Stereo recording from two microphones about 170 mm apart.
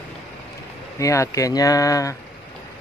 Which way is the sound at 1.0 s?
20° left (ahead or behind).